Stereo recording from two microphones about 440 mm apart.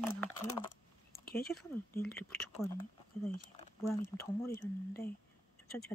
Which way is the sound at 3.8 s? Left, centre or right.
Centre.